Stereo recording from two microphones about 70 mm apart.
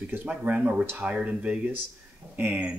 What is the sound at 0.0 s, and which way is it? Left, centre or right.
Speech, right.